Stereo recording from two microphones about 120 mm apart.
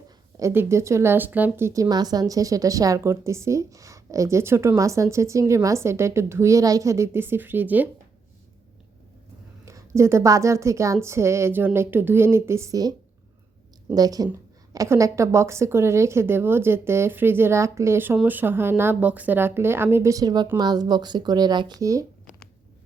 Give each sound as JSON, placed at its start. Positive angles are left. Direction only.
{"t": 0.3, "sound": "speech", "side_deg": -20}
{"t": 9.6, "sound": "speech", "side_deg": -25}